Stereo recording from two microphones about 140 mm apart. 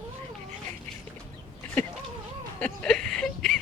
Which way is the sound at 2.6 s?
5° left (ahead or behind).